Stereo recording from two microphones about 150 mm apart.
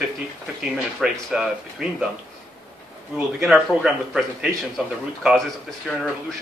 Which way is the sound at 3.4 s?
5° right (ahead or behind).